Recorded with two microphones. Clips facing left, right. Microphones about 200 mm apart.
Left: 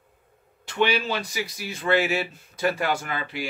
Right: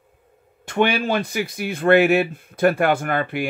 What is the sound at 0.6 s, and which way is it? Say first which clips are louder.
Speech: right 4 dB; 50° right (ahead or behind).